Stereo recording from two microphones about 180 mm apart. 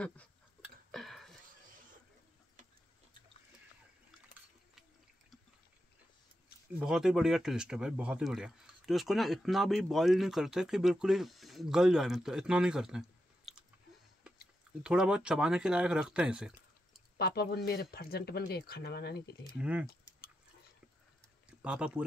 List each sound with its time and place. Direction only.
0.0 s a sound: 5° left (ahead or behind)
6.8 s speech: 5° right (ahead or behind)
13.5 s chewing: centre (ahead or behind)
14.8 s speech: 5° right (ahead or behind)
17.2 s speech: 60° left (ahead or behind)
19.6 s speech: 5° right (ahead or behind)
21.5 s speech: 5° right (ahead or behind)